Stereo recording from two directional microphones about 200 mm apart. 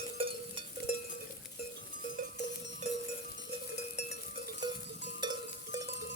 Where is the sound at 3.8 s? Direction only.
35° left (ahead or behind).